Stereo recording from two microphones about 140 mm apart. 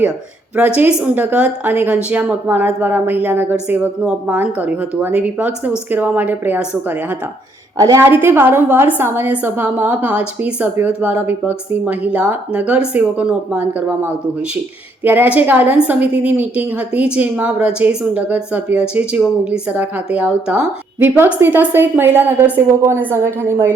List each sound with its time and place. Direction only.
0.8 s a woman's voice: 10° right (ahead or behind)